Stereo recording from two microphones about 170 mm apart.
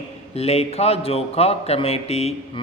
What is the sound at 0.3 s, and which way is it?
Speech, 35° left (ahead or behind).